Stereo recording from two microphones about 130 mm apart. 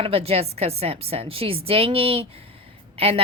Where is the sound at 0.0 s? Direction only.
50° right (ahead or behind).